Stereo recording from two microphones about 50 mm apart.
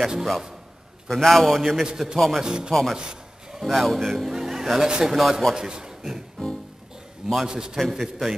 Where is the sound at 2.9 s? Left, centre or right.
Centre.